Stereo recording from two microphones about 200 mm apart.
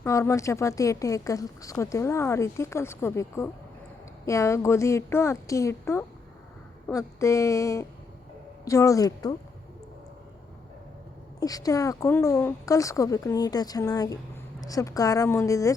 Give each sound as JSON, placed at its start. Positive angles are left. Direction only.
{"t": 0.0, "sound": "speech", "side_deg": 15}
{"t": 11.3, "sound": "speech", "side_deg": 20}